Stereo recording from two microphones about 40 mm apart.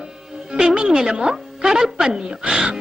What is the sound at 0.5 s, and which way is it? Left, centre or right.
Speech, right.